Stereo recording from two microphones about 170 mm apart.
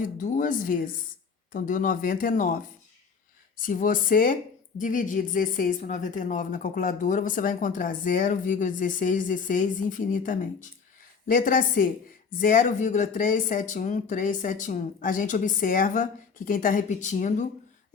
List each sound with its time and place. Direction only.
0.0 s a woman's voice: 50° left (ahead or behind)
3.6 s a woman's voice: 50° left (ahead or behind)